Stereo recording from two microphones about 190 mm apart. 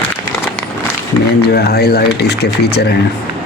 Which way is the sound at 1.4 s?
60° left (ahead or behind).